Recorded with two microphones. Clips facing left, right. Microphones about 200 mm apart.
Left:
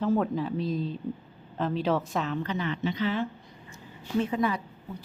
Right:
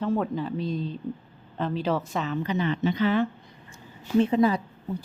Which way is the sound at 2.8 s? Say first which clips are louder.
Right 5 dB; 55° right (ahead or behind).